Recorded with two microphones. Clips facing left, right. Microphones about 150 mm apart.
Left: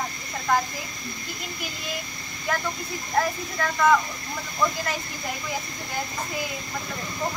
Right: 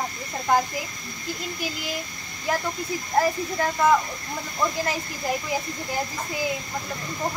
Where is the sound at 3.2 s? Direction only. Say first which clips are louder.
Right 3 dB; 25° right (ahead or behind).